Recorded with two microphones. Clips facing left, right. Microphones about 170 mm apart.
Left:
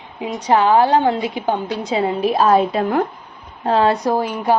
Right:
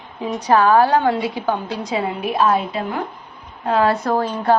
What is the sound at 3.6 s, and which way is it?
Speech, 25° left (ahead or behind).